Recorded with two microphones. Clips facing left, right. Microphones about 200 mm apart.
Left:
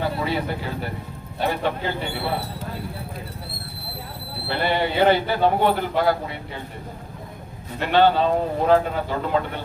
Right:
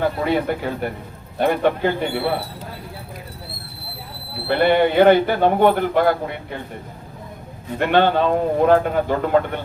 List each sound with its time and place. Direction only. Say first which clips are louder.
0.0 s speech: right 5 dB; 50° right (ahead or behind)
4.4 s speech: right 7 dB; 55° right (ahead or behind)
7.8 s speech: right 1 dB; 55° right (ahead or behind)